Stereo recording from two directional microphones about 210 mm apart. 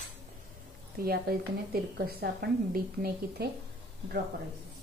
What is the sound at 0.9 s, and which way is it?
A woman's voice, 45° right (ahead or behind).